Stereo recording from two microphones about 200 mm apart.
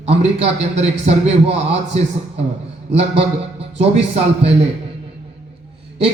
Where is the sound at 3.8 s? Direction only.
30° right (ahead or behind).